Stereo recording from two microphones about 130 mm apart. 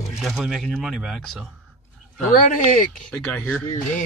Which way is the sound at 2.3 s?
85° left.